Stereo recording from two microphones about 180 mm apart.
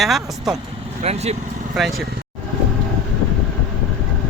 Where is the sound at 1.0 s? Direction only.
35° right (ahead or behind).